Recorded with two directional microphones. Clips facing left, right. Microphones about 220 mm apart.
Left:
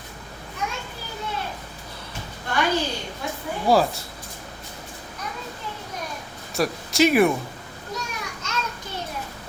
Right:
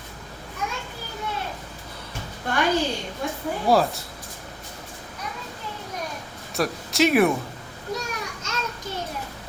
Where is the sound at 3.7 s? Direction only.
Centre (ahead or behind).